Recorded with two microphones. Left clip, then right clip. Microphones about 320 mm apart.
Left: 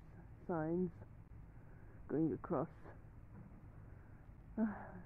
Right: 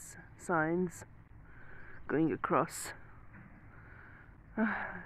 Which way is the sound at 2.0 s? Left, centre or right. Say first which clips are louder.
Right 7 dB; right.